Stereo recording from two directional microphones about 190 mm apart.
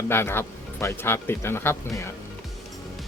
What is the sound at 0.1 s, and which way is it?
Speech, 10° left (ahead or behind).